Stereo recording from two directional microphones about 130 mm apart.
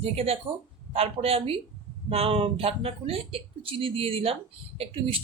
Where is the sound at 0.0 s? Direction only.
50° right (ahead or behind).